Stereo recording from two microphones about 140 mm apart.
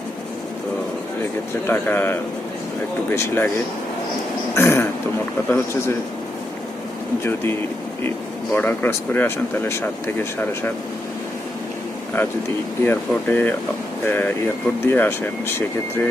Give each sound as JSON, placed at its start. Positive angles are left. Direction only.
{"t": 1.6, "sound": "speech", "side_deg": 15}
{"t": 4.5, "sound": "speech", "side_deg": 20}
{"t": 8.5, "sound": "speech", "side_deg": 15}
{"t": 12.8, "sound": "speech", "side_deg": 15}